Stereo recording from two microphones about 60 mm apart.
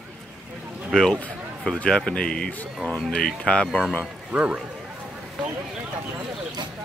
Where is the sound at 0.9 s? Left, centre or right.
Centre.